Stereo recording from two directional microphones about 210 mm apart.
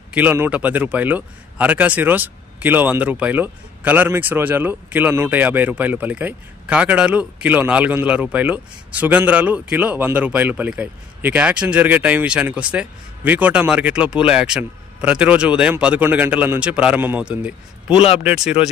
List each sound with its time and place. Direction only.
0.1 s a man's voice: 10° right (ahead or behind)
17.9 s speech: 30° left (ahead or behind)
18.2 s speech: 5° right (ahead or behind)